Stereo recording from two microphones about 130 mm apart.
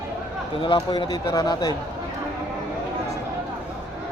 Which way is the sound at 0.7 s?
30° left (ahead or behind).